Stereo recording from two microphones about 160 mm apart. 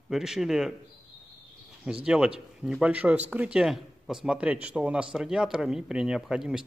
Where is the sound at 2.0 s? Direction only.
5° right (ahead or behind).